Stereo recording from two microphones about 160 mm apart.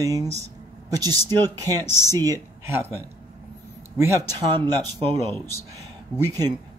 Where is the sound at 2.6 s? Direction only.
15° right (ahead or behind).